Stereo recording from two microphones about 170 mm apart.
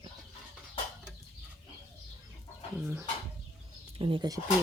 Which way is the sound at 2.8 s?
10° right (ahead or behind).